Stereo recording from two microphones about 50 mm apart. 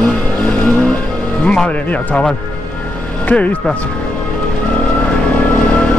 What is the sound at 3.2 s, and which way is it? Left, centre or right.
Speech, left.